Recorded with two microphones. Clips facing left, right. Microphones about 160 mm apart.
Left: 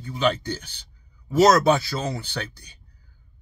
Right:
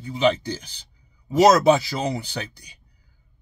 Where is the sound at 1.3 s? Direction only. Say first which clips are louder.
Right 2 dB; 15° right (ahead or behind).